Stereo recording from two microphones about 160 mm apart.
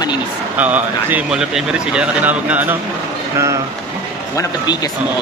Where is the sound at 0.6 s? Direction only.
10° right (ahead or behind).